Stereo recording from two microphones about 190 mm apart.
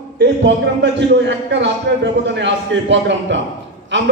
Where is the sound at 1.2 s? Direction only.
70° right (ahead or behind).